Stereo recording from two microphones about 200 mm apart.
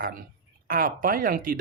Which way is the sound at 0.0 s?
45° right (ahead or behind).